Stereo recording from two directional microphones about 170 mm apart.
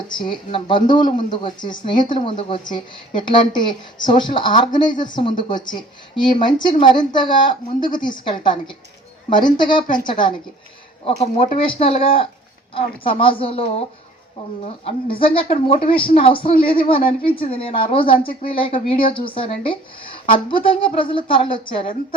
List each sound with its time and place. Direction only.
0.2 s speech: 30° left (ahead or behind)
14.8 s speech: 30° left (ahead or behind)